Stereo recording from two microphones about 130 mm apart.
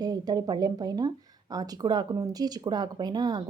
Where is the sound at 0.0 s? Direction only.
30° right (ahead or behind).